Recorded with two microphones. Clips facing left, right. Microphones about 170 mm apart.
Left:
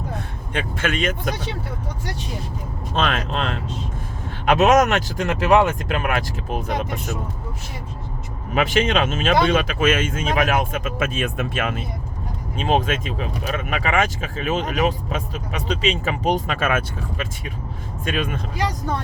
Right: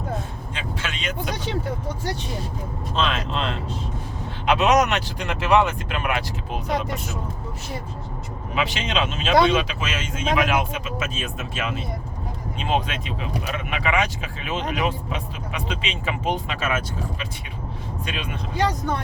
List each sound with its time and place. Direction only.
0.5 s speech: 55° left (ahead or behind)
2.9 s speech: 55° left (ahead or behind)
8.5 s speech: 50° left (ahead or behind)
12.5 s speech: 45° left (ahead or behind)
16.6 s speech: 55° left (ahead or behind)